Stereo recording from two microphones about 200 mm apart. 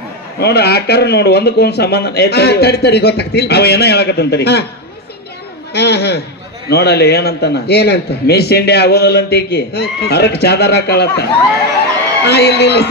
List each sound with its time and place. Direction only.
0.4 s a man's voice: 55° left (ahead or behind)
5.7 s a man's voice: 55° left (ahead or behind)
12.3 s a man's voice: 55° left (ahead or behind)